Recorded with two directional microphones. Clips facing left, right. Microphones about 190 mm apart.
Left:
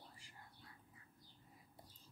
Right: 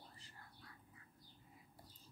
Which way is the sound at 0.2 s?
15° left (ahead or behind).